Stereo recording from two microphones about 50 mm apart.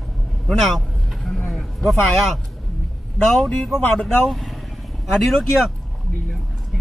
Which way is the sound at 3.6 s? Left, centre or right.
Centre.